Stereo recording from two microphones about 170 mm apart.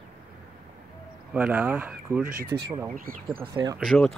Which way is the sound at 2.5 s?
20° right (ahead or behind).